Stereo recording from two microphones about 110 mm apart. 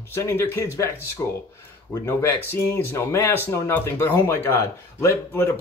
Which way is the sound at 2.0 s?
20° left (ahead or behind).